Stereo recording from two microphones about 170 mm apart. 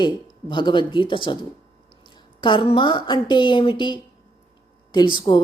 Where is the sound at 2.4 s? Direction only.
30° left (ahead or behind).